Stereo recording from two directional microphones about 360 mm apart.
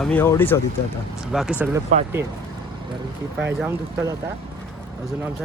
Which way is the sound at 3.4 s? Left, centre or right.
Centre.